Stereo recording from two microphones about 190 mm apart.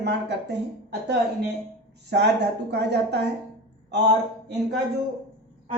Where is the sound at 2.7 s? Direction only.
60° right (ahead or behind).